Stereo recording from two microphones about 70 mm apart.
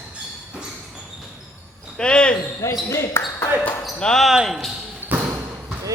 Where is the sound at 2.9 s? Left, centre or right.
Left.